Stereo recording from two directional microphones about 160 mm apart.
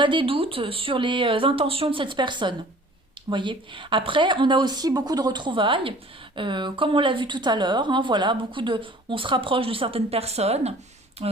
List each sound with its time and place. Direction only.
0.0 s a woman's voice: 30° right (ahead or behind)